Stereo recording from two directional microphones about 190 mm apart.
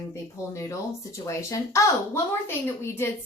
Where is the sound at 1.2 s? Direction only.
15° left (ahead or behind).